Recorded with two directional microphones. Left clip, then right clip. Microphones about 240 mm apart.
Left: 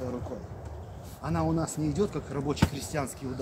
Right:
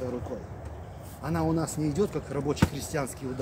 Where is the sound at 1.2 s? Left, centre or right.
Centre.